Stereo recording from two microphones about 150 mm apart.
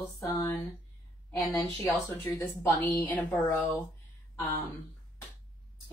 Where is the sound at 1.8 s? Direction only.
15° left (ahead or behind).